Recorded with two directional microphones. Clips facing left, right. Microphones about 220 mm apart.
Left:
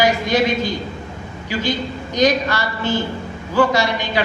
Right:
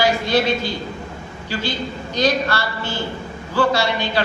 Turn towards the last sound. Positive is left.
turn(degrees=15)  # may be behind; listen again after turning